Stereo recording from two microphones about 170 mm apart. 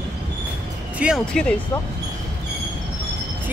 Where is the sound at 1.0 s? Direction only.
5° right (ahead or behind).